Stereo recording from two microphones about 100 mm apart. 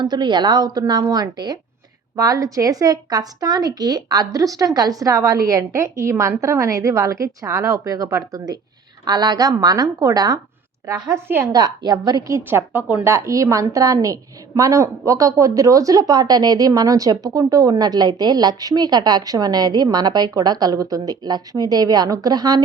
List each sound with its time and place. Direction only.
0.0 s a woman's voice: 50° right (ahead or behind); by 11.2 s 30° right (ahead or behind)
11.5 s speech: 45° right (ahead or behind)
12.4 s a woman's voice: 20° right (ahead or behind)
13.1 s a woman's voice: 30° right (ahead or behind)